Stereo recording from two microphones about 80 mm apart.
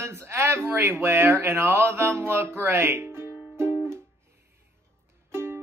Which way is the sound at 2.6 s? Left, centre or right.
Right.